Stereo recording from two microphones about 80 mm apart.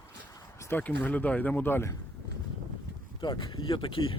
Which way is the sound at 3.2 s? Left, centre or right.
Left.